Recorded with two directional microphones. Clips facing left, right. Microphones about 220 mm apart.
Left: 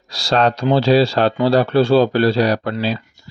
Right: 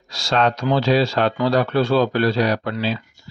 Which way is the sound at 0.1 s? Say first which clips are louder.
Left 3 dB; 35° left (ahead or behind).